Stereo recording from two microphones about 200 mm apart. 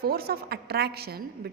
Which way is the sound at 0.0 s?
50° right (ahead or behind).